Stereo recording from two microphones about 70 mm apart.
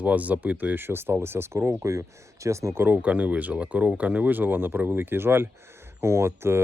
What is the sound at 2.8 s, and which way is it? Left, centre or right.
Speech, right.